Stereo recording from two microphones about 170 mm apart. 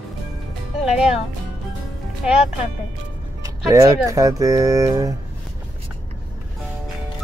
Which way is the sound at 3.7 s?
20° right (ahead or behind).